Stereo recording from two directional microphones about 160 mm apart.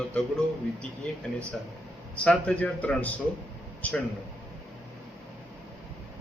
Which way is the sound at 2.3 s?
10° left (ahead or behind).